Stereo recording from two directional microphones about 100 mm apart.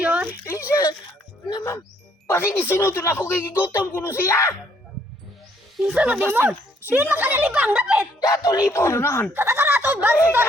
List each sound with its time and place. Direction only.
0.0 s a sound: 15° right (ahead or behind)
0.4 s a sound: 30° left (ahead or behind)
2.2 s speech: 25° left (ahead or behind)
5.7 s a woman's voice: 10° right (ahead or behind)
8.2 s speech: 40° left (ahead or behind)
8.7 s speech: 25° left (ahead or behind)
9.3 s speech: 25° right (ahead or behind)